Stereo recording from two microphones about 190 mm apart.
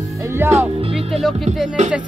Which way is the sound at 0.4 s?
10° right (ahead or behind).